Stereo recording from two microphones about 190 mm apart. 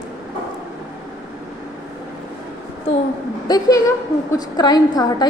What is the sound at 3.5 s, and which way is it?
A woman's voice, 20° left (ahead or behind).